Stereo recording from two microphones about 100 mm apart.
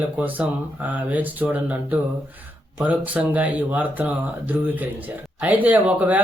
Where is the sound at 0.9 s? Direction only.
15° right (ahead or behind).